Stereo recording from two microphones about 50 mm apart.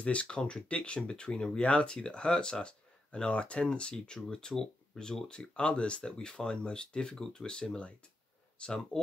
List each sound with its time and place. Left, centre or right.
0.0 s speech: left